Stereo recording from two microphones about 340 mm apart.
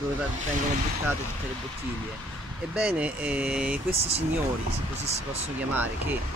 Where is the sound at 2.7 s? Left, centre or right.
Centre.